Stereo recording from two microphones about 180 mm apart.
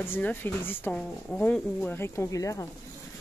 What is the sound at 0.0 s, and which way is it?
Speech, 10° left (ahead or behind).